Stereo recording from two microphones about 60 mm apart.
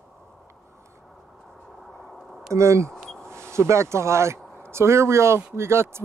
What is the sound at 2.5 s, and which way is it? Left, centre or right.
Speech, right.